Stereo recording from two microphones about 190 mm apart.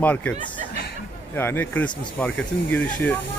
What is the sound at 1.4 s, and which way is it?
Speech, 10° left (ahead or behind).